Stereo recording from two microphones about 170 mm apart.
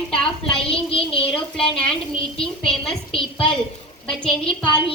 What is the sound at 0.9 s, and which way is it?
Speech, 35° left (ahead or behind).